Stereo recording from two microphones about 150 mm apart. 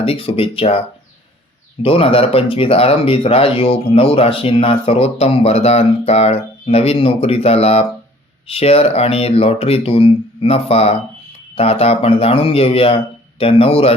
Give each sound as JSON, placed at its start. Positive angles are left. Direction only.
{"t": 0.0, "sound": "speech", "side_deg": 40}
{"t": 1.8, "sound": "speech", "side_deg": 40}